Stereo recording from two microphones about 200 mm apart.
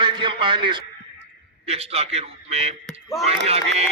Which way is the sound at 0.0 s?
25° right (ahead or behind).